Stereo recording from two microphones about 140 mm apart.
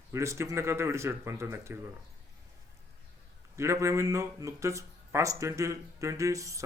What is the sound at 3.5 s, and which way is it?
Speech, 20° right (ahead or behind).